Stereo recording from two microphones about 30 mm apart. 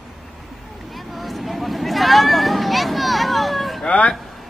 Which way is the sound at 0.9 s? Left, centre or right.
Centre.